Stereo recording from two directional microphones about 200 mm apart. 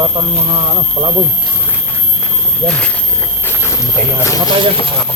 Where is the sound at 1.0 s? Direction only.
35° right (ahead or behind).